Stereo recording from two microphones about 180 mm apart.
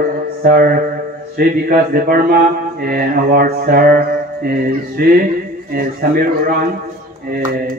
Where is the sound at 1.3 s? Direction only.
55° right (ahead or behind).